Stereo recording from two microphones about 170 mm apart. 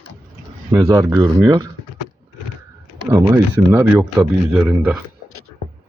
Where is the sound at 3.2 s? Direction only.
15° right (ahead or behind).